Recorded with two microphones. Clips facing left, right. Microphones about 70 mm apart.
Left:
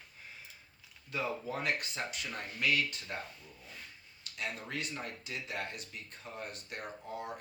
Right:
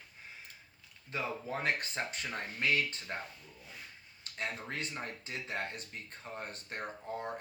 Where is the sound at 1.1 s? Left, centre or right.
Right.